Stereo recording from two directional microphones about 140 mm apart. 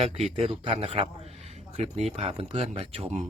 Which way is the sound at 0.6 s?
40° right (ahead or behind).